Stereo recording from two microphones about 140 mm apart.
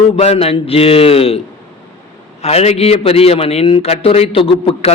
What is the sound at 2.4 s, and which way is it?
A man's voice, 50° left (ahead or behind).